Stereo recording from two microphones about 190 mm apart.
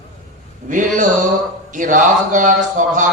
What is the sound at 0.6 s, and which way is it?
Speech, 40° right (ahead or behind).